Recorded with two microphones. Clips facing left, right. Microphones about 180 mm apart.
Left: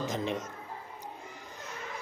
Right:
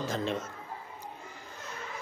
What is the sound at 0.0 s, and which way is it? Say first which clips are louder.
Speech: even; 15° left (ahead or behind).